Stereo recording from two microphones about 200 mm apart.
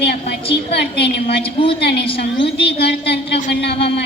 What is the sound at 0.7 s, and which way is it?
Speech, 55° left (ahead or behind).